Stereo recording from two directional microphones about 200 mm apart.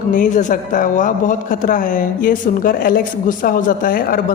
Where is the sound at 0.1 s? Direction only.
40° left (ahead or behind).